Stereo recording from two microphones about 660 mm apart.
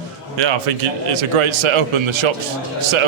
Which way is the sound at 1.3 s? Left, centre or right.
Right.